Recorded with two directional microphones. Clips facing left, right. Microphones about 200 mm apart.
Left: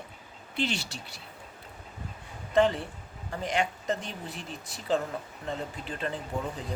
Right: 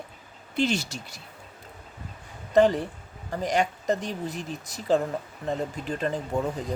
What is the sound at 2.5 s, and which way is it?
A woman's voice, 40° right (ahead or behind).